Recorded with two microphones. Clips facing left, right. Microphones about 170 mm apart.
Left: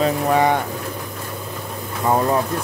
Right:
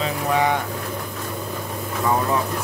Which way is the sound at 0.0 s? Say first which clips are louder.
Left 4 dB; 45° left (ahead or behind).